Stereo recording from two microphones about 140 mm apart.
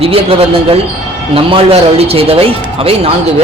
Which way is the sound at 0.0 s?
40° right (ahead or behind).